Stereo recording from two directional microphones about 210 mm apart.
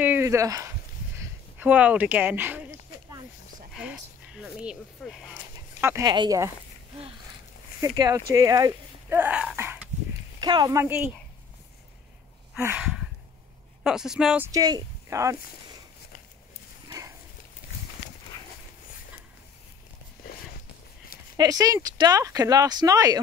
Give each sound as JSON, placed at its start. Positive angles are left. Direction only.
{"t": 0.0, "sound": "a sound", "side_deg": -10}
{"t": 3.7, "sound": "a sound", "side_deg": -5}
{"t": 5.8, "sound": "speech", "side_deg": -15}
{"t": 7.8, "sound": "speech", "side_deg": -15}
{"t": 10.4, "sound": "speech", "side_deg": -20}
{"t": 12.5, "sound": "speech", "side_deg": -10}
{"t": 14.5, "sound": "speech", "side_deg": -15}
{"t": 21.4, "sound": "speech", "side_deg": -15}